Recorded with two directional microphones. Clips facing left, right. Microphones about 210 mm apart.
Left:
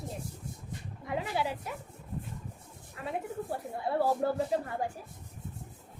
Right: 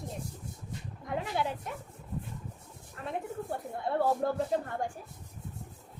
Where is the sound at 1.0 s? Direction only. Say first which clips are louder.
Even; 5° left (ahead or behind).